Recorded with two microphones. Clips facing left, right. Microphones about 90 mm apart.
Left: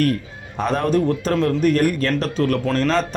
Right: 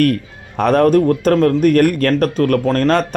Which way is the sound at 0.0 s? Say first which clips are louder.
Right 5 dB; 60° right (ahead or behind).